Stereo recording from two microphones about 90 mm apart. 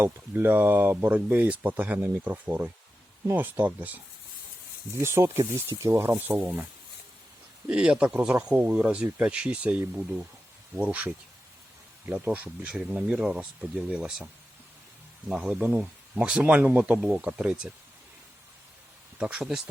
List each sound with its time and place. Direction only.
0.0 s speech: 25° right (ahead or behind)
4.9 s speech: 30° right (ahead or behind)
7.7 s speech: 10° right (ahead or behind)
15.3 s speech: 5° right (ahead or behind)
19.2 s speech: 10° right (ahead or behind)